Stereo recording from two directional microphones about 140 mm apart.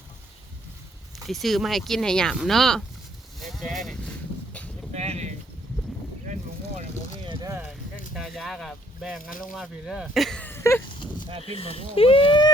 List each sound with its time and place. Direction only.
1.3 s speech: centre (ahead or behind)
4.9 s a sound: 50° right (ahead or behind)
8.1 s speech: centre (ahead or behind)
10.4 s a sound: 20° left (ahead or behind)
11.3 s speech: 45° right (ahead or behind)
11.5 s speech: 45° left (ahead or behind)